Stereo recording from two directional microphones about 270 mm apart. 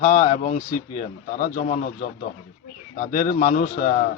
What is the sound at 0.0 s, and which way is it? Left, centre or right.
Speech, left.